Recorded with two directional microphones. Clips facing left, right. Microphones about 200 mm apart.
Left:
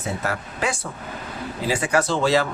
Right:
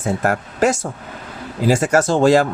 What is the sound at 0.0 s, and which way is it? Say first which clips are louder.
Speech: right 7 dB; 50° right (ahead or behind).